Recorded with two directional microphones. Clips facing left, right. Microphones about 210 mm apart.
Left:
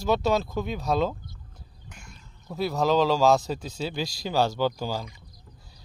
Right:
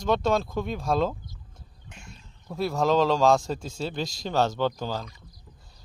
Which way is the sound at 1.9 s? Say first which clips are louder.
Right 2 dB; 25° right (ahead or behind).